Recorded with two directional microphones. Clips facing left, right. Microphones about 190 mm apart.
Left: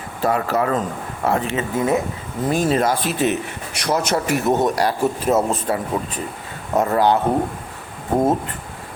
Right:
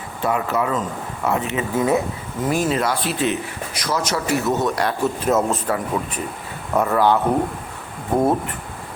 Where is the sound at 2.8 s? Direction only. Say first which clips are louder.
Left 2 dB; 45° left (ahead or behind).